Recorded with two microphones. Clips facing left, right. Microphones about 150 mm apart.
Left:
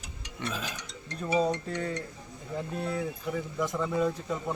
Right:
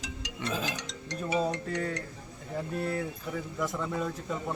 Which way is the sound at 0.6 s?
90° right.